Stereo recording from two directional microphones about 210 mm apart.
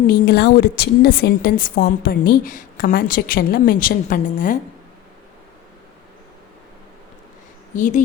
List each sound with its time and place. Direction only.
0.1 s a woman's voice: 50° left (ahead or behind)
7.8 s speech: 35° left (ahead or behind)